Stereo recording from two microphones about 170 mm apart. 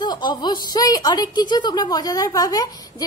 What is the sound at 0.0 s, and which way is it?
A woman's voice, 25° left (ahead or behind).